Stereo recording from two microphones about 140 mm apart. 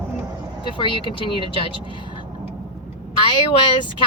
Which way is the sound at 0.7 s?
35° left (ahead or behind).